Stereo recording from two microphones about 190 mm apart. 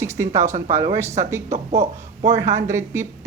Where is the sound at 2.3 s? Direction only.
15° right (ahead or behind).